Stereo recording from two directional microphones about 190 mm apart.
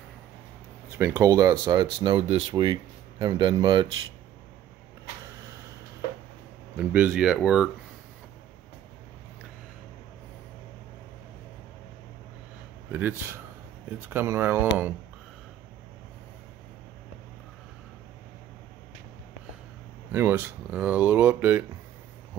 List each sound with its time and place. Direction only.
0.9 s speech: 15° right (ahead or behind)
6.8 s speech: 10° right (ahead or behind)
12.9 s speech: 10° right (ahead or behind)
20.1 s speech: 10° right (ahead or behind)